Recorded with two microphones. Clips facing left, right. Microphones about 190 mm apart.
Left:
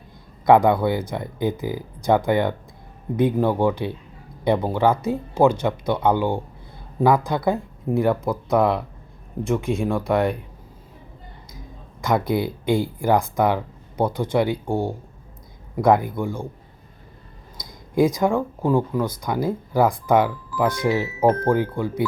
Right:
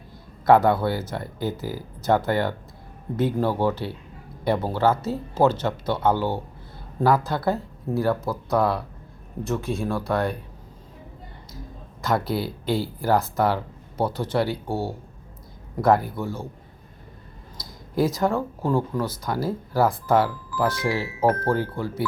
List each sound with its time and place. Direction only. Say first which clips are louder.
0.4 s speech: left 2 dB; 15° left (ahead or behind)
12.0 s speech: left 3 dB; 15° left (ahead or behind)
17.6 s speech: left 4 dB; 15° left (ahead or behind)